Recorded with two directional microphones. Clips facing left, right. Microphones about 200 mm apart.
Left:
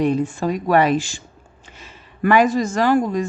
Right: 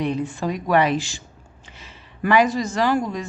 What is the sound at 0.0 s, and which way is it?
A woman's voice, 45° left (ahead or behind).